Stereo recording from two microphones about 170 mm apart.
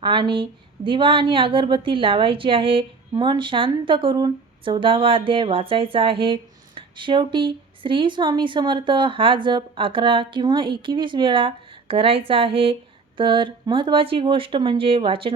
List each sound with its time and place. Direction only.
0.0 s a woman's voice: 30° right (ahead or behind)